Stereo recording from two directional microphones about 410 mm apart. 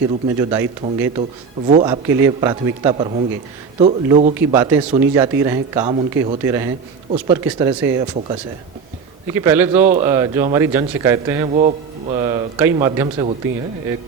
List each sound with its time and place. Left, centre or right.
0.3 s a man's voice: centre